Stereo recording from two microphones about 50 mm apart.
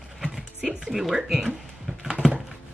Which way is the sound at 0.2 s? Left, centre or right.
Centre.